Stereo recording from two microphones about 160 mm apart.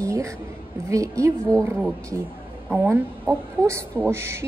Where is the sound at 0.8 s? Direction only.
20° right (ahead or behind).